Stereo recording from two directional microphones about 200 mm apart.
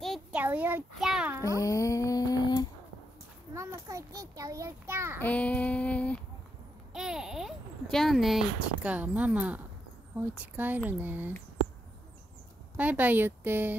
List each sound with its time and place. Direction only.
0.0 s a child's voice: centre (ahead or behind)
1.6 s a sound: 15° left (ahead or behind)
3.5 s a child's voice: 15° right (ahead or behind)
5.2 s female singing: 5° left (ahead or behind)
6.9 s a child's voice: centre (ahead or behind)
12.7 s a child's voice: 10° right (ahead or behind)